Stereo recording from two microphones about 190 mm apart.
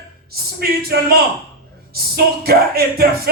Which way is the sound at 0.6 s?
55° right (ahead or behind).